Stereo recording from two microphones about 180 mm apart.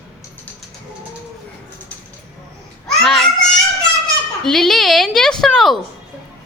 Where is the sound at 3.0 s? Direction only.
Centre (ahead or behind).